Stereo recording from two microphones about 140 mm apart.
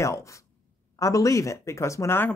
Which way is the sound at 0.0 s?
20° left (ahead or behind).